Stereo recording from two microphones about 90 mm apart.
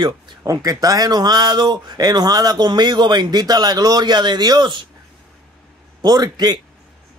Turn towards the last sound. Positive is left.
turn(degrees=-50)  # may be behind; listen again after turning